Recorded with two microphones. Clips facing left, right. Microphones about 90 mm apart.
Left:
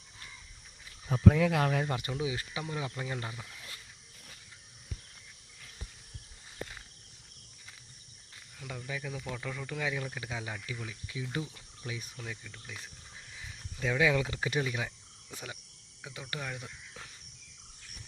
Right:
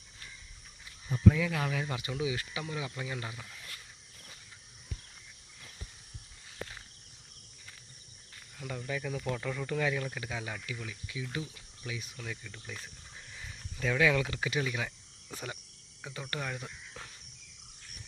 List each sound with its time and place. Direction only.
1.2 s speech: 55° left (ahead or behind)
2.1 s speech: 30° left (ahead or behind)
3.2 s speech: 10° left (ahead or behind)
8.5 s speech: centre (ahead or behind)
11.1 s speech: 30° left (ahead or behind)
12.1 s speech: 10° left (ahead or behind)
13.3 s cricket: 5° left (ahead or behind)
13.8 s speech: 15° left (ahead or behind)
15.3 s speech: centre (ahead or behind)